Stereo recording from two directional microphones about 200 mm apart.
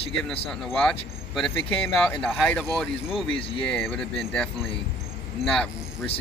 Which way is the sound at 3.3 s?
30° left (ahead or behind).